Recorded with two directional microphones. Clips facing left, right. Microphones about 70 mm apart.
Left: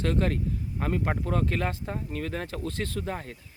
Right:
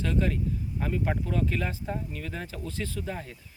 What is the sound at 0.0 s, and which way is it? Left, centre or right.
A man's voice, left.